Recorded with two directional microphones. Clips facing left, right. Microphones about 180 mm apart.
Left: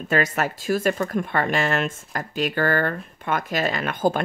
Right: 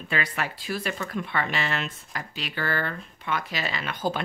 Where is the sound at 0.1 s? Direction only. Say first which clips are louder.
Left 7 dB; 45° left (ahead or behind).